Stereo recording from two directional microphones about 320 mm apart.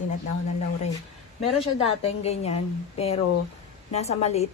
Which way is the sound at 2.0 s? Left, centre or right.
Centre.